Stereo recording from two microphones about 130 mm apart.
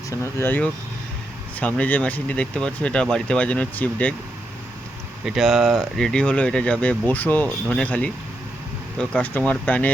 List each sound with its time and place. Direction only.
0.1 s speech: 20° left (ahead or behind)
5.2 s speech: 5° right (ahead or behind); by 9.9 s 10° left (ahead or behind)